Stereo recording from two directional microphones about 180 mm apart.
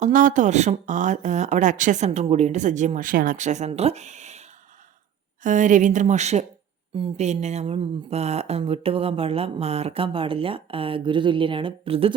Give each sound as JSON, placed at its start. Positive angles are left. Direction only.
{"t": 0.0, "sound": "speech", "side_deg": -45}